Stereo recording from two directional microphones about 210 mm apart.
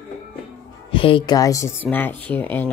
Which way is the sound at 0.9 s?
25° left (ahead or behind).